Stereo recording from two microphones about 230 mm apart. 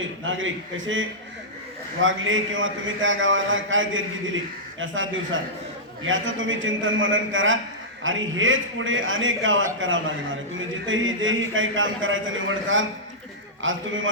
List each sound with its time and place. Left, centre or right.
0.3 s a man's voice: right